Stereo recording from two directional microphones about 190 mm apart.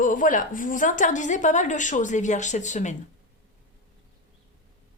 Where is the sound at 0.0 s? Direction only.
45° left (ahead or behind).